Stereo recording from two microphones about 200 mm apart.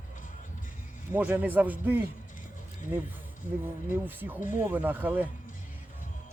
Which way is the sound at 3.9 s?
10° right (ahead or behind).